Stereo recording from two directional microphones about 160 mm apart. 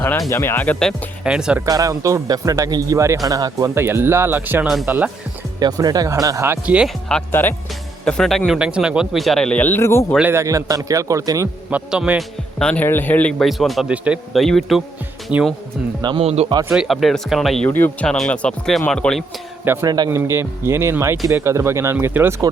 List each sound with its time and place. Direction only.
0.3 s a man's voice: 15° left (ahead or behind); by 1.6 s 5° right (ahead or behind)
1.6 s speech: 20° right (ahead or behind)
5.5 s speech: 25° right (ahead or behind); by 6.9 s 5° right (ahead or behind)
7.1 s a man's voice: 15° left (ahead or behind)
10.2 s speech: 15° right (ahead or behind)
11.7 s speech: 10° right (ahead or behind)
12.5 s a man's voice: 5° left (ahead or behind)
16.0 s speech: 30° right (ahead or behind)
16.7 s a man's voice: centre (ahead or behind)
17.7 s a man's voice: 10° left (ahead or behind)
19.6 s speech: 15° right (ahead or behind)